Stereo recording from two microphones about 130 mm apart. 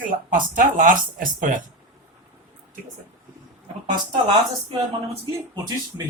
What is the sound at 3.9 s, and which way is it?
Speech, 35° right (ahead or behind).